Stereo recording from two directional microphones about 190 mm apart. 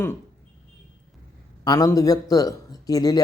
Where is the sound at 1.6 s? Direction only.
20° left (ahead or behind).